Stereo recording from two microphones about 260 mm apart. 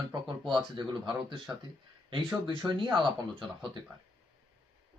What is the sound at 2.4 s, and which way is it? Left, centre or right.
Speech, centre.